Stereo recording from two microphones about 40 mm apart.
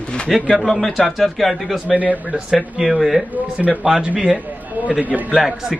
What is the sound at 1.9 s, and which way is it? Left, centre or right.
Speech, right.